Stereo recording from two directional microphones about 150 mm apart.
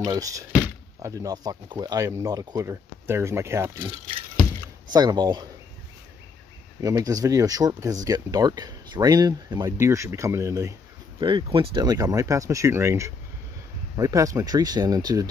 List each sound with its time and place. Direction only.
0.0 s speech: 25° right (ahead or behind)
4.9 s speech: 25° right (ahead or behind)
6.8 s speech: 20° right (ahead or behind)
11.1 s speech: 30° right (ahead or behind)